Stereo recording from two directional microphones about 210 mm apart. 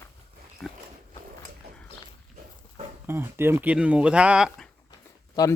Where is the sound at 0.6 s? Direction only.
15° left (ahead or behind).